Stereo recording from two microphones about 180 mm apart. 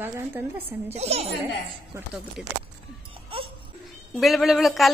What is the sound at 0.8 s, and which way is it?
Speech, 35° right (ahead or behind).